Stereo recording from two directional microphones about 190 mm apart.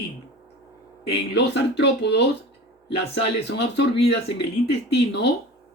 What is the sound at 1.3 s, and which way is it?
Speech, 65° left (ahead or behind).